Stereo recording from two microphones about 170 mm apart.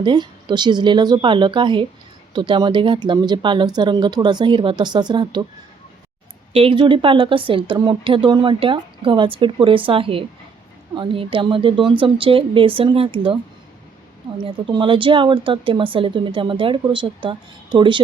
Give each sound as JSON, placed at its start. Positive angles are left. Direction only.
{"t": 0.0, "sound": "speech", "side_deg": -30}
{"t": 6.5, "sound": "speech", "side_deg": -30}
{"t": 14.4, "sound": "speech", "side_deg": -30}